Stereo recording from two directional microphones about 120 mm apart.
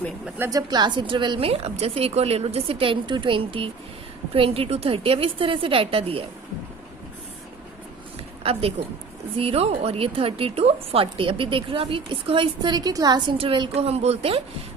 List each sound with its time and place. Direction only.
0.3 s a woman's voice: 20° right (ahead or behind)
0.7 s a woman's voice: 40° right (ahead or behind)
9.4 s a woman's voice: 55° right (ahead or behind)